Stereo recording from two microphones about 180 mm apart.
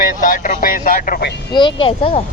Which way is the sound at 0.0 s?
50° left (ahead or behind).